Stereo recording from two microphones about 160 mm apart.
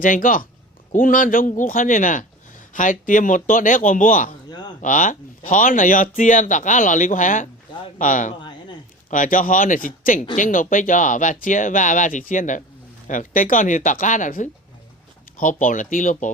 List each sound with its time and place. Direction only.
0.0 s speech: 55° left (ahead or behind)